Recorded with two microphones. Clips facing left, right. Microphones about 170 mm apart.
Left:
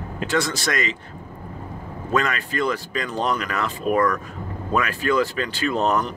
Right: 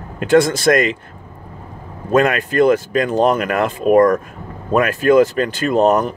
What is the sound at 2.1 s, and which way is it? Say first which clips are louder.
Speech: right 8 dB; 55° right (ahead or behind).